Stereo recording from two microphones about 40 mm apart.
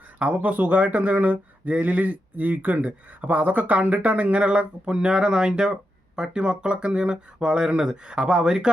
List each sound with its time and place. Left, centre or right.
0.2 s speech: right